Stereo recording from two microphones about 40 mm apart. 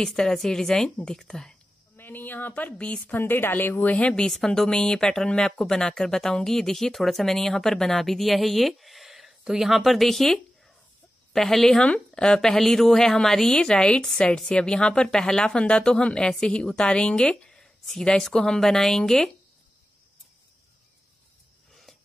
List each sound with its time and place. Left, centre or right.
0.1 s speech: centre
2.0 s speech: left
3.2 s a woman's voice: left
4.6 s a woman's voice: centre